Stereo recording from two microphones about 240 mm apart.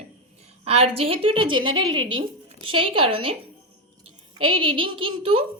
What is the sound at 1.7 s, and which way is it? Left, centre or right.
Speech, right.